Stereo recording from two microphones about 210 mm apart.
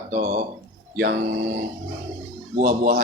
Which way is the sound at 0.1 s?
45° right (ahead or behind).